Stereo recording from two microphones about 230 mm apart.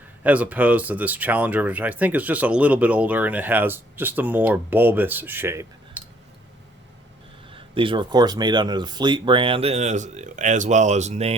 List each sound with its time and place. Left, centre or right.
0.2 s speech: centre
7.5 s speech: right